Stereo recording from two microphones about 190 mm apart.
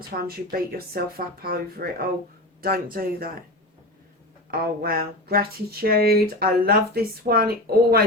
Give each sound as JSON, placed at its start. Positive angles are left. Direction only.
{"t": 0.1, "sound": "speech", "side_deg": -50}
{"t": 4.5, "sound": "speech", "side_deg": -50}